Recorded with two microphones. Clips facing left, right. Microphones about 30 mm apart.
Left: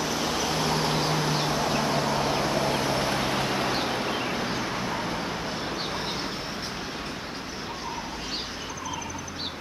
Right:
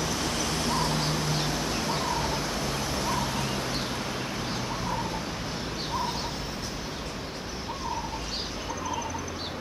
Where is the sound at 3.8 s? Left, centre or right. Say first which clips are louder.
Left 4 dB; left.